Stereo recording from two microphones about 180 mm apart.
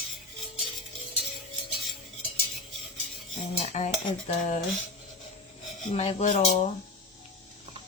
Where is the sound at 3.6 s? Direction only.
40° left (ahead or behind).